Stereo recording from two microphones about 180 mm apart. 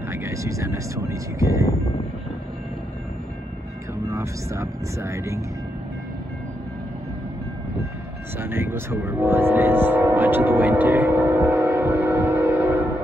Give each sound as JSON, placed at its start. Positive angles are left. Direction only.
{"t": 0.1, "sound": "speech", "side_deg": -15}
{"t": 4.1, "sound": "speech", "side_deg": -15}
{"t": 8.4, "sound": "speech", "side_deg": -10}